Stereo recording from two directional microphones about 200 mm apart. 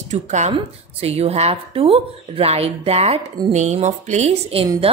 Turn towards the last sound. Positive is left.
turn(degrees=-30)  # may be behind; listen again after turning